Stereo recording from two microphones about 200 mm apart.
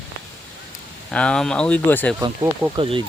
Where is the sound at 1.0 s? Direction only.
5° left (ahead or behind).